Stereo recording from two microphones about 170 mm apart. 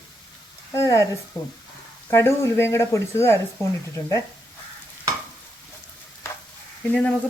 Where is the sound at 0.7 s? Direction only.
15° left (ahead or behind).